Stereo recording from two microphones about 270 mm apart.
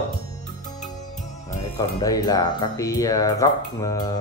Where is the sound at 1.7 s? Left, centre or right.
Centre.